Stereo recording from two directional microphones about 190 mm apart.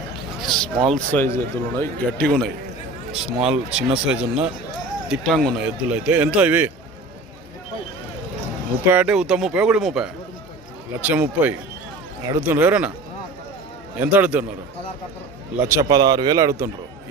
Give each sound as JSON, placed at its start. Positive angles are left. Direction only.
{"t": 0.3, "sound": "speech", "side_deg": 0}
{"t": 8.8, "sound": "speech", "side_deg": -10}
{"t": 14.0, "sound": "speech", "side_deg": -10}
{"t": 15.6, "sound": "speech", "side_deg": -15}